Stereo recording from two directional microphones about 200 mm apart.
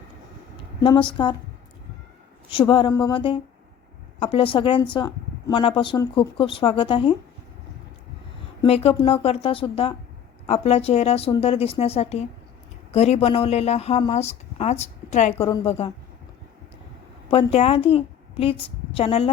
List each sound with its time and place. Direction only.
0.8 s speech: 25° left (ahead or behind)
2.5 s speech: 25° left (ahead or behind)
8.6 s speech: 30° left (ahead or behind)
15.4 s speech: 25° left (ahead or behind)
17.3 s a woman's voice: 30° left (ahead or behind)